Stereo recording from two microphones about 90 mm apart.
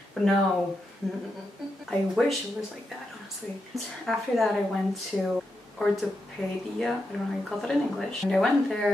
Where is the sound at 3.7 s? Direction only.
Centre (ahead or behind).